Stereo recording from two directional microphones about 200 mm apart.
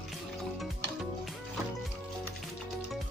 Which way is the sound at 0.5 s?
Centre (ahead or behind).